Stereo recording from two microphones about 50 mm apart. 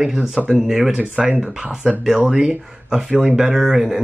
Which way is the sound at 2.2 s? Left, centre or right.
Centre.